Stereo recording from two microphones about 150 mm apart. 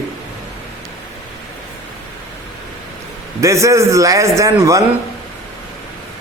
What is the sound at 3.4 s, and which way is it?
A man's voice, 20° right (ahead or behind).